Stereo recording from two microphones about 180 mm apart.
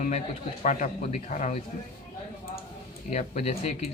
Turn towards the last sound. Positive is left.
turn(degrees=35)  # may be behind; listen again after turning